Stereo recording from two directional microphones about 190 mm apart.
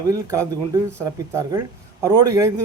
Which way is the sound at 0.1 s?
15° right (ahead or behind).